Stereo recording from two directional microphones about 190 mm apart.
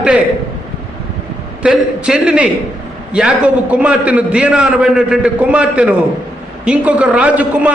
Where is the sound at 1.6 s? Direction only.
5° right (ahead or behind).